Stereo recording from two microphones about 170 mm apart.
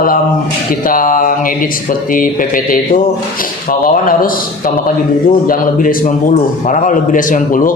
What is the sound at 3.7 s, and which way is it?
A man's voice, 55° left (ahead or behind).